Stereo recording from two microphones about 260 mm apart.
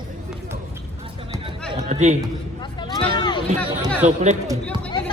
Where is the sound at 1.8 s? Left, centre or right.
Right.